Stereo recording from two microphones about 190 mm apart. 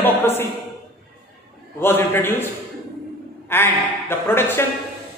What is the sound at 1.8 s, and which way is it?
Speech, 10° left (ahead or behind).